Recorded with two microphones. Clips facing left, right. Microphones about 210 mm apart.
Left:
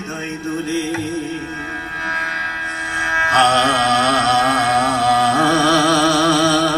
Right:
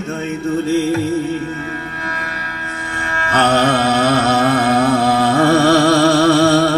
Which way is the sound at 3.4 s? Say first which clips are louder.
Right 3 dB; 50° right (ahead or behind).